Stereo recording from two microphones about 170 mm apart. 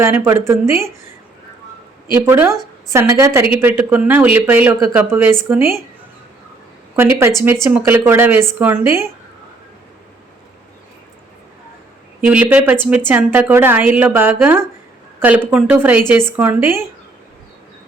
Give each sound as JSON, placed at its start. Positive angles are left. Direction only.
{"t": 0.0, "sound": "a woman's voice", "side_deg": -15}
{"t": 2.1, "sound": "a woman's voice", "side_deg": -15}
{"t": 6.9, "sound": "a woman's voice", "side_deg": -15}
{"t": 12.3, "sound": "a woman's voice", "side_deg": -5}